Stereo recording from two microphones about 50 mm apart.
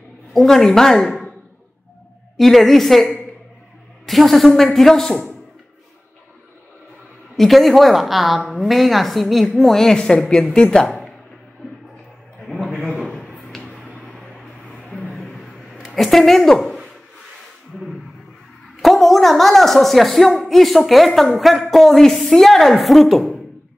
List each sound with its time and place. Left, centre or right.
0.3 s speech: centre
2.3 s speech: centre
7.3 s a woman's voice: centre
12.4 s a sound: centre
15.1 s a sound: centre
18.8 s speech: centre